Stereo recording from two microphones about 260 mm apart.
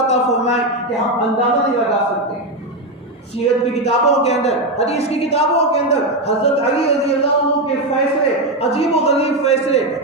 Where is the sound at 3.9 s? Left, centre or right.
Left.